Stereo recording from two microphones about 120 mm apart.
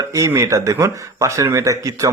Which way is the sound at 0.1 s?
25° right (ahead or behind).